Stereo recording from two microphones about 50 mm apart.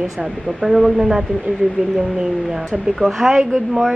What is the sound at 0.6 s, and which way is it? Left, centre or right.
Speech, centre.